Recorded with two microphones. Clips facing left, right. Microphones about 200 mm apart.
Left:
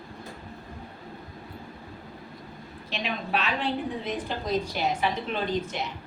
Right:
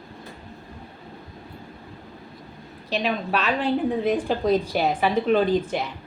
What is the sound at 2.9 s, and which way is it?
Speech, 40° right (ahead or behind).